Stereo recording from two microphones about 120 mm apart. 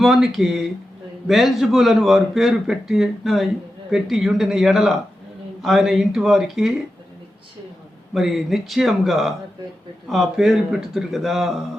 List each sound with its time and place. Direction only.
0.0 s a man's voice: 5° right (ahead or behind)
8.1 s a man's voice: centre (ahead or behind)